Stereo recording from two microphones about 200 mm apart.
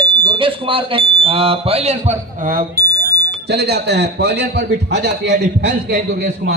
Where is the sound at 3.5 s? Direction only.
55° right (ahead or behind).